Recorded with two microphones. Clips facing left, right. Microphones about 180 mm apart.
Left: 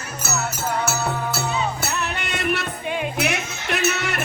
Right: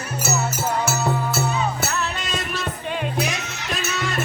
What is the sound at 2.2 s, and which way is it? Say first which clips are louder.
Music: left 3 dB; 65° left (ahead or behind).